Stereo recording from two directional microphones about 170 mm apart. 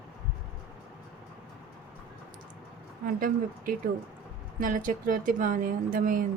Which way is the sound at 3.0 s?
55° right (ahead or behind).